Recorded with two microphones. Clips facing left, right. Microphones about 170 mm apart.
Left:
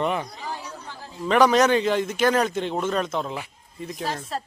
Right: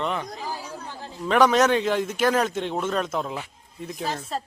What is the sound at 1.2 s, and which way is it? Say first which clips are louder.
Speech: left 1 dB; centre (ahead or behind).